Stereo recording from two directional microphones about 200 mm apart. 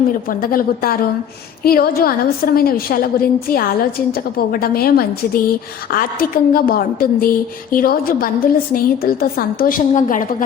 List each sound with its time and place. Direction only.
0.3 s a woman's voice: 45° left (ahead or behind)